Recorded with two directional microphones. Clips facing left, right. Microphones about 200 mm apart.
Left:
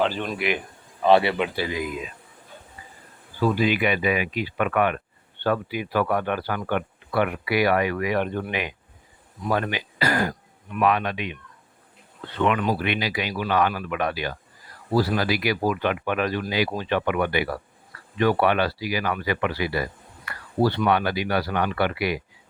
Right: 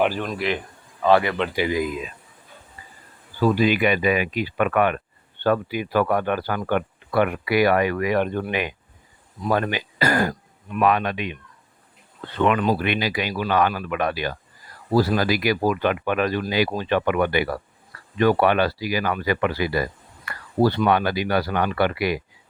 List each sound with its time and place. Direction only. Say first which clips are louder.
0.0 s speech: right 2 dB; 10° right (ahead or behind)
0.3 s speech: right 1 dB; 5° left (ahead or behind)
1.0 s speech: even; 20° left (ahead or behind)
3.6 s speech: right 3 dB; 45° right (ahead or behind)
12.5 s speech: right 3 dB; 45° right (ahead or behind)